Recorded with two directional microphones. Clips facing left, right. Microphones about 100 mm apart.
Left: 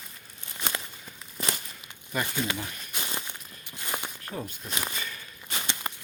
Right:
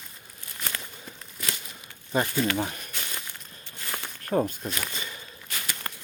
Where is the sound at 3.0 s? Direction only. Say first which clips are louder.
Left 2 dB; 20° left (ahead or behind).